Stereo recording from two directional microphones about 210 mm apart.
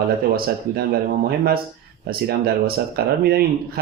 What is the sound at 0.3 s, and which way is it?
Speech, 45° right (ahead or behind).